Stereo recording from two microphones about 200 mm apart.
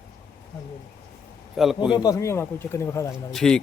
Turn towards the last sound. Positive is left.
turn(degrees=5)  # may be behind; listen again after turning